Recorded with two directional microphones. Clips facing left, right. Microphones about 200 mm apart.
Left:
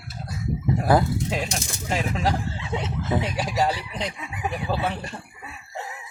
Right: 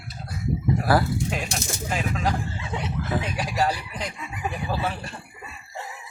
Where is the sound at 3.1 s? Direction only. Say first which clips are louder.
Left 4 dB; 20° left (ahead or behind).